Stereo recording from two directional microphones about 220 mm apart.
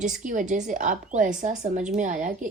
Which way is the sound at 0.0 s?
35° right (ahead or behind).